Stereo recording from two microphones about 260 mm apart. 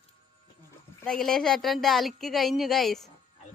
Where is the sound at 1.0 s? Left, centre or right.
Centre.